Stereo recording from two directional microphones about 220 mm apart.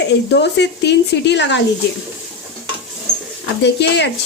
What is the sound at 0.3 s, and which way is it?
Speech, 50° left (ahead or behind).